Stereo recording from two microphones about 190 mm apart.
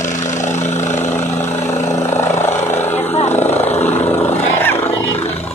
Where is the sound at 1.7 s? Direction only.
15° left (ahead or behind).